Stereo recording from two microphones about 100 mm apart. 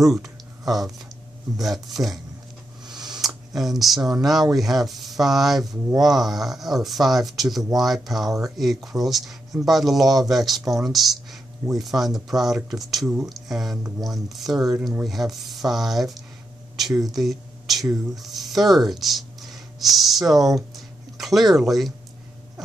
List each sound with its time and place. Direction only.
0.1 s speech: centre (ahead or behind)
2.9 s a sound: 45° right (ahead or behind)
3.2 s a sound: centre (ahead or behind)
4.0 s speech: 40° right (ahead or behind)
4.6 s speech: centre (ahead or behind)
8.3 s speech: 35° right (ahead or behind)
8.5 s speech: centre (ahead or behind)